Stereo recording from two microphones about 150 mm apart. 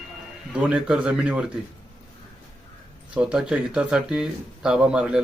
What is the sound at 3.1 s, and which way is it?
Speech, 5° right (ahead or behind).